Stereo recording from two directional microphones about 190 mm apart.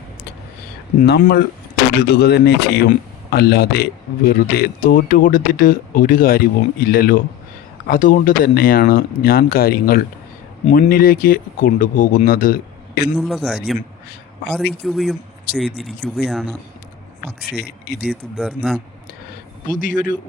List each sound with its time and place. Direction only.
1.0 s speech: 60° left (ahead or behind)
13.1 s speech: centre (ahead or behind)
17.4 s speech: 55° left (ahead or behind)
18.0 s speech: 5° right (ahead or behind)
19.6 s speech: 45° left (ahead or behind)